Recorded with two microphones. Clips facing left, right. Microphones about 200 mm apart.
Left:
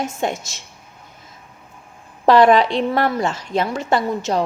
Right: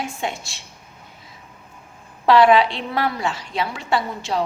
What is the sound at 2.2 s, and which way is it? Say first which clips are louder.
A woman's voice: left 2 dB; 45° left (ahead or behind).